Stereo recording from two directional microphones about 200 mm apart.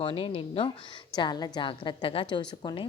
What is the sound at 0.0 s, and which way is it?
A woman's voice, 25° left (ahead or behind).